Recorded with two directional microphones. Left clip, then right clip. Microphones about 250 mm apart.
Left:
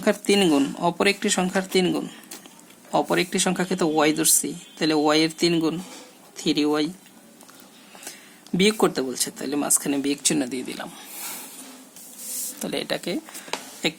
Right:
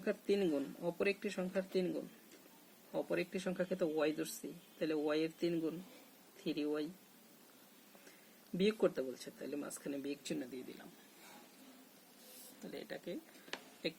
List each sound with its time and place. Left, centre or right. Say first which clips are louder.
0.0 s speech: left 16 dB; left
2.9 s speech: left 17 dB; left
8.5 s speech: left 14 dB; left
12.6 s speech: left 19 dB; left